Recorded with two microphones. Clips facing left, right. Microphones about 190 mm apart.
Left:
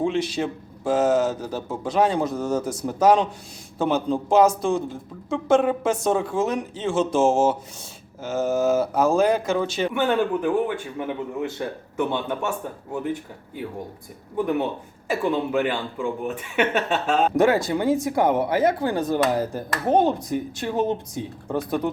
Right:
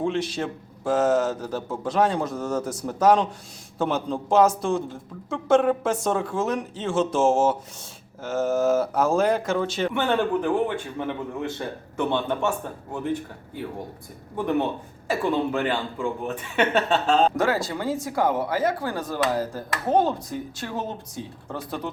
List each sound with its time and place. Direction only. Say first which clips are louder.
0.0 s a man's voice: left 2 dB; centre (ahead or behind)
15.2 s speech: left 2 dB; 15° left (ahead or behind)